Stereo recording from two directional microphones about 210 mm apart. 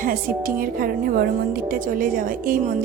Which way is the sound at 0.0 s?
40° right (ahead or behind).